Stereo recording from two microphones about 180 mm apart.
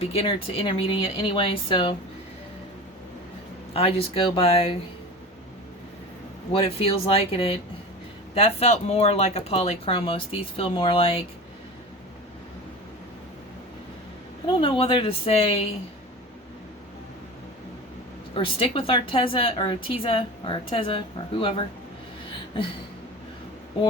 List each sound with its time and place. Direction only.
0.0 s speech: 35° left (ahead or behind)
3.8 s speech: 30° left (ahead or behind)
6.5 s speech: 30° left (ahead or behind)
14.4 s speech: 30° left (ahead or behind)
18.3 s speech: 30° left (ahead or behind)